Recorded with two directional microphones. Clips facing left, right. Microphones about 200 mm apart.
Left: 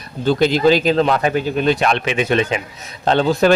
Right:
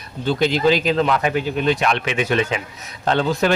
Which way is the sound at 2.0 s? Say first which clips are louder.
Left 3 dB; 25° left (ahead or behind).